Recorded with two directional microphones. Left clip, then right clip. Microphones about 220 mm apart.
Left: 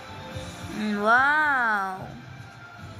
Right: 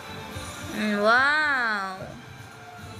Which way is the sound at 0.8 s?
15° left (ahead or behind).